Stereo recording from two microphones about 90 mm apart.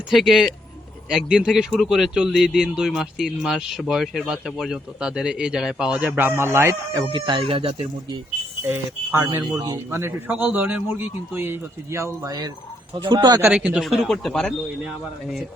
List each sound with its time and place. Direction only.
0.1 s speech: centre (ahead or behind); by 7.0 s 30° right (ahead or behind)
7.0 s speech: 60° right (ahead or behind); by 7.7 s 85° right
9.7 s speech: 30° right (ahead or behind)
10.3 s speech: 20° right (ahead or behind); by 12.5 s 40° right (ahead or behind)
12.9 s speech: 60° right (ahead or behind)
13.5 s speech: 15° right (ahead or behind)
13.7 s speech: centre (ahead or behind)